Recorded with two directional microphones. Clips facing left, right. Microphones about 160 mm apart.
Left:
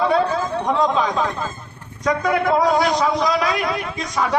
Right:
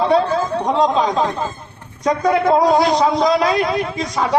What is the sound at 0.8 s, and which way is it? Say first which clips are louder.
A man's voice: right 4 dB; 25° right (ahead or behind).